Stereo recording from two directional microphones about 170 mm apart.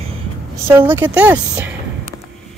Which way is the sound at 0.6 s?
15° right (ahead or behind).